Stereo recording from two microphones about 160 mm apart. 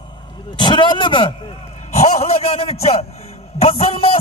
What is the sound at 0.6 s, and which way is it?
Speech, 30° left (ahead or behind).